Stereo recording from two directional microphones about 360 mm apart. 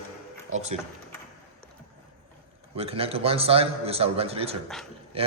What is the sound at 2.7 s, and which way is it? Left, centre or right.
A man's voice, centre.